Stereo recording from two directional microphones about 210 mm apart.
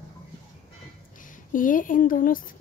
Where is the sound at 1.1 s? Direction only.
40° left (ahead or behind).